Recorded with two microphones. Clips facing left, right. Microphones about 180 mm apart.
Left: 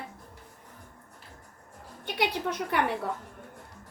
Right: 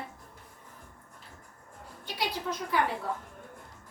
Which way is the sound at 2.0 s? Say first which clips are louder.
Left 4 dB; 65° left (ahead or behind).